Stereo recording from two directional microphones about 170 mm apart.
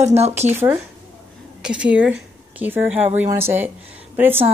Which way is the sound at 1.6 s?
5° right (ahead or behind).